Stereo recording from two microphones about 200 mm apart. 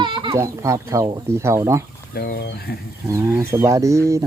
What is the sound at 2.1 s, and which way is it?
Speech, 50° left (ahead or behind).